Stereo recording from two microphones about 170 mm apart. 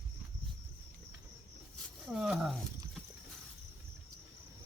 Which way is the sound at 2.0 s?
Centre (ahead or behind).